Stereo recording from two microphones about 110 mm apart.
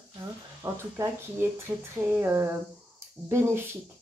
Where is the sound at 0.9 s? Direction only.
30° right (ahead or behind).